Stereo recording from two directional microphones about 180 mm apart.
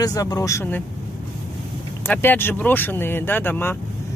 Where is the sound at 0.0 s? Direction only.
20° left (ahead or behind).